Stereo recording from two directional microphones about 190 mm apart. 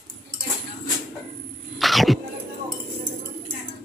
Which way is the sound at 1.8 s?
Centre (ahead or behind).